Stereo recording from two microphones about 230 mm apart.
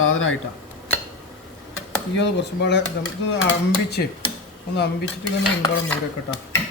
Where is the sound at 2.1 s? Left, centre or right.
Left.